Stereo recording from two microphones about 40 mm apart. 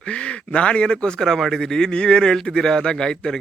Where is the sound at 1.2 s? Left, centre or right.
Centre.